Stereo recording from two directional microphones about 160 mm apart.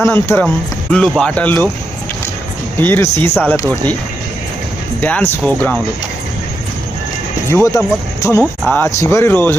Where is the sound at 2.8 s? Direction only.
15° left (ahead or behind).